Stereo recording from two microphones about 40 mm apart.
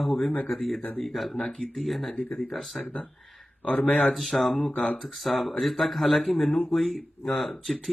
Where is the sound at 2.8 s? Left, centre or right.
Left.